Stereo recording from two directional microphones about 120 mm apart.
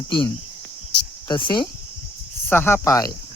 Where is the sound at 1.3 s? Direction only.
40° left (ahead or behind).